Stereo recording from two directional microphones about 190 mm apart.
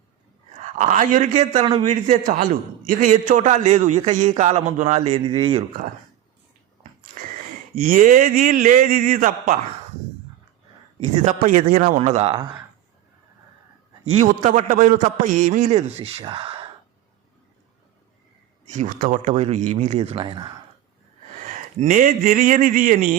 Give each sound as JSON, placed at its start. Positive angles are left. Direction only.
{"t": 0.6, "sound": "a man's voice", "side_deg": -40}
{"t": 7.8, "sound": "a man's voice", "side_deg": -45}
{"t": 11.0, "sound": "a man's voice", "side_deg": -40}
{"t": 14.3, "sound": "a man's voice", "side_deg": -40}
{"t": 18.7, "sound": "a man's voice", "side_deg": -40}
{"t": 21.4, "sound": "a man's voice", "side_deg": -40}